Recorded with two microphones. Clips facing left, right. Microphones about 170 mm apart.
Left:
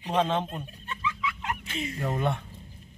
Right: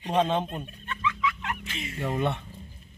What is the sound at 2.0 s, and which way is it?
Speech, centre (ahead or behind).